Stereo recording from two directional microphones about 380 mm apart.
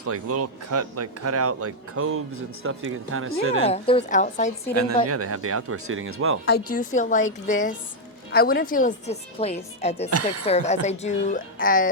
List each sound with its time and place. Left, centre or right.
0.0 s speech: right
3.7 s a woman's voice: centre
4.7 s speech: right
6.4 s a woman's voice: left
10.1 s speech: right
10.4 s a woman's voice: centre